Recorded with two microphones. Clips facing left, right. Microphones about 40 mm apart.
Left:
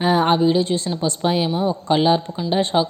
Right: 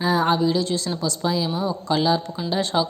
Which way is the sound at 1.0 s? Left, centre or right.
Left.